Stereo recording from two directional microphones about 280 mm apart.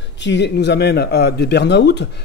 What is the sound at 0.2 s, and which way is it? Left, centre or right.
Speech, left.